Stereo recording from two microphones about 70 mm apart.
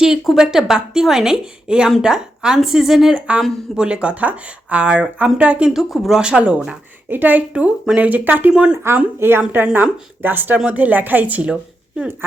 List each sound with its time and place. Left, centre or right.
0.0 s a woman's voice: centre
3.2 s a woman's voice: centre
5.6 s a woman's voice: centre
7.1 s speech: right
8.5 s a woman's voice: centre
9.1 s a woman's voice: right